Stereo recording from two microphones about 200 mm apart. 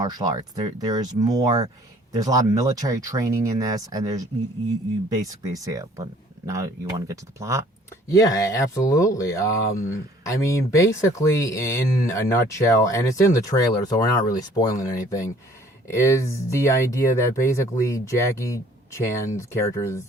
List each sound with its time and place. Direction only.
0.0 s speech: 20° right (ahead or behind)
5.5 s speech: 15° right (ahead or behind)
8.1 s speech: 15° left (ahead or behind)